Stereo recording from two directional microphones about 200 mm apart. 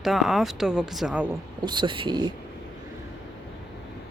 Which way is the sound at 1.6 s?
25° right (ahead or behind).